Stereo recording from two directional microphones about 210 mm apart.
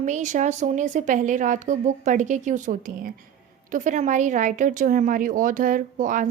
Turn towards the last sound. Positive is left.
turn(degrees=-40)  # may be behind; listen again after turning